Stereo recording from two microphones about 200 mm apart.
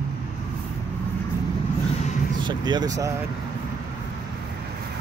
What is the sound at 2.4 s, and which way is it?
Speech, 20° right (ahead or behind).